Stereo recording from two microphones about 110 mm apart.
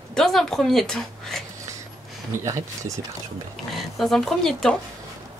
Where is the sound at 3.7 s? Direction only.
Centre (ahead or behind).